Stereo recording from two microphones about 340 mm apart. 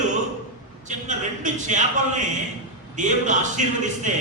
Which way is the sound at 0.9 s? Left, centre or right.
Right.